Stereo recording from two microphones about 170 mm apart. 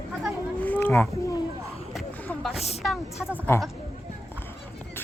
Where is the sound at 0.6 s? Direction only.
10° left (ahead or behind).